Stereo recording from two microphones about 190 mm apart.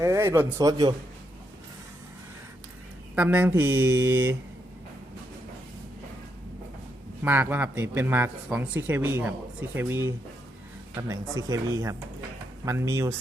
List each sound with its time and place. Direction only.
0.0 s a man's voice: 15° right (ahead or behind)
3.2 s a man's voice: 10° right (ahead or behind)
7.2 s a man's voice: 10° right (ahead or behind)